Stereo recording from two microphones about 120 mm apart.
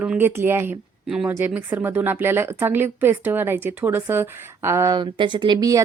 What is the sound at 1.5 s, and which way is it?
Speech, 15° right (ahead or behind).